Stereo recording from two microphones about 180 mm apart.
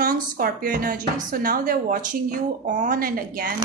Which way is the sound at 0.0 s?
55° right (ahead or behind).